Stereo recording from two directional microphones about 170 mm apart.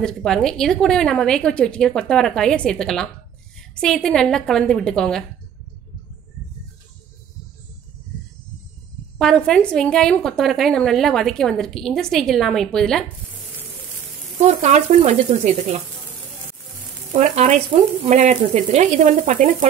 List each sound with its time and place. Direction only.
0.0 s a woman's voice: 5° left (ahead or behind)
9.2 s a woman's voice: 5° left (ahead or behind)
14.4 s speech: 40° right (ahead or behind)
17.1 s speech: 40° right (ahead or behind)
17.6 s frying: 40° right (ahead or behind)